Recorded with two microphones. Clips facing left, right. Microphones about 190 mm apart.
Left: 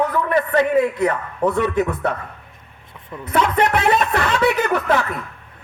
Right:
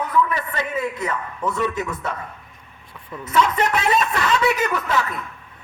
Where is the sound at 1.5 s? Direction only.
60° left (ahead or behind).